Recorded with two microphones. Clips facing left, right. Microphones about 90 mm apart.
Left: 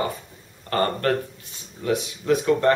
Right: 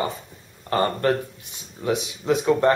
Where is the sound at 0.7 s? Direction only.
20° right (ahead or behind).